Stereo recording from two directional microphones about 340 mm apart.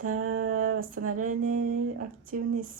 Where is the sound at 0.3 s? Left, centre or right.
Right.